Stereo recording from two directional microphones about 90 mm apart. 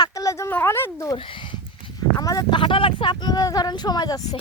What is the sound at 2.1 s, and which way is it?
Speech, 40° left (ahead or behind).